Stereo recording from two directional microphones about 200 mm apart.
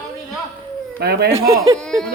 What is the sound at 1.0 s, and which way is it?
Speech, 55° right (ahead or behind).